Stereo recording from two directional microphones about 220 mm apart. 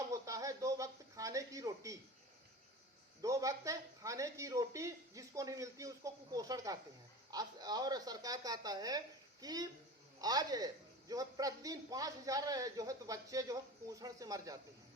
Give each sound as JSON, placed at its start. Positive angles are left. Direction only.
{"t": 0.1, "sound": "speech", "side_deg": -15}
{"t": 3.2, "sound": "speech", "side_deg": -15}